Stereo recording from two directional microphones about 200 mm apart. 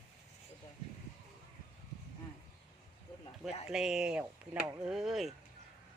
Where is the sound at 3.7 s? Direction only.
Centre (ahead or behind).